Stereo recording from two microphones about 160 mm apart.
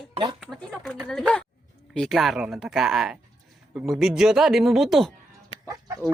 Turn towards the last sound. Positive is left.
turn(degrees=-20)  # may be behind; listen again after turning